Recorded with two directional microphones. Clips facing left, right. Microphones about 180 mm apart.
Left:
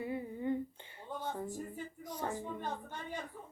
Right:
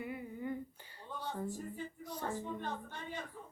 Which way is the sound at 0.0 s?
30° left (ahead or behind).